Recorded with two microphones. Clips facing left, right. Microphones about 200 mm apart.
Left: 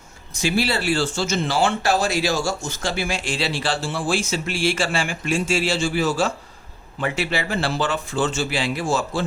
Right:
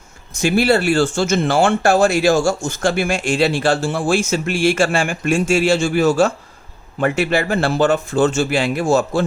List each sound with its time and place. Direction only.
0.3 s speech: 50° right (ahead or behind)